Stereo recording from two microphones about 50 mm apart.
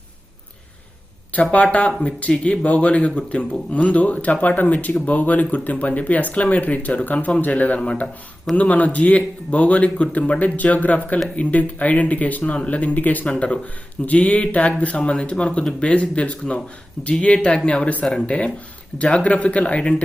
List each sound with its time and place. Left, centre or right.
1.4 s speech: centre